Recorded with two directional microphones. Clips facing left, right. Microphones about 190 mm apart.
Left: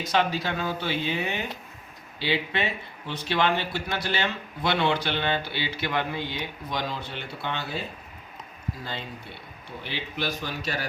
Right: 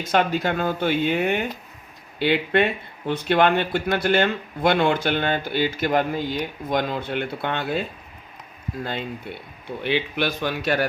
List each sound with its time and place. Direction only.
0.1 s speech: 50° right (ahead or behind)
9.6 s speech: 65° right (ahead or behind)